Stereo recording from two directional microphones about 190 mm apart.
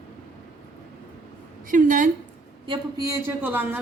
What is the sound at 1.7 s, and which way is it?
Speech, 45° right (ahead or behind).